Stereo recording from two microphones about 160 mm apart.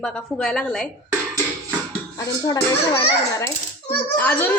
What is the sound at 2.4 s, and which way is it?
A woman's voice, 25° left (ahead or behind).